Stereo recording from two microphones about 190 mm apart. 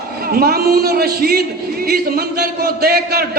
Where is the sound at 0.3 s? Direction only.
50° right (ahead or behind).